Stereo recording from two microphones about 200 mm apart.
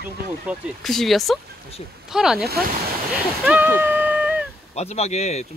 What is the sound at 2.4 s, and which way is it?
Speech, 50° right (ahead or behind).